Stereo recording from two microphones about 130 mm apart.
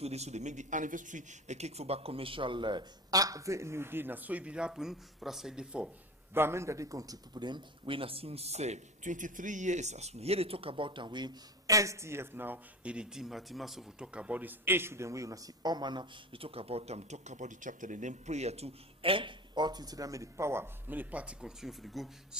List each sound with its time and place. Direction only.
0.0 s speech: 55° right (ahead or behind); by 5.9 s 5° right (ahead or behind)
6.3 s speech: 20° right (ahead or behind); by 22.4 s centre (ahead or behind)